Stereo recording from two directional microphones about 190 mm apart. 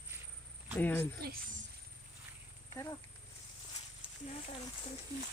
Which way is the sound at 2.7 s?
15° left (ahead or behind).